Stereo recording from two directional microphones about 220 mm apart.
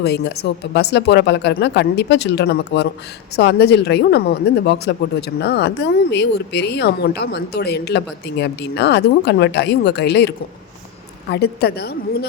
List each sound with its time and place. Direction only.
0.0 s speech: 50° left (ahead or behind)